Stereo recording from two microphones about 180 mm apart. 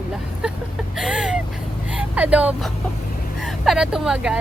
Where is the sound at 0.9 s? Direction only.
5° right (ahead or behind).